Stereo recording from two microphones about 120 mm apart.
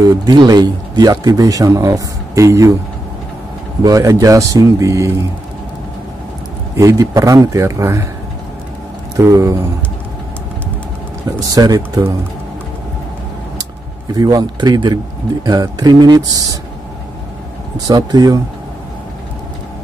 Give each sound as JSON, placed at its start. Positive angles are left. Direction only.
{"t": 0.0, "sound": "a man's voice", "side_deg": -35}
{"t": 3.8, "sound": "speech", "side_deg": -30}
{"t": 6.8, "sound": "speech", "side_deg": -30}
{"t": 9.1, "sound": "speech", "side_deg": -25}
{"t": 11.4, "sound": "a man's voice", "side_deg": -30}
{"t": 14.1, "sound": "a man's voice", "side_deg": -30}
{"t": 17.7, "sound": "a man's voice", "side_deg": -30}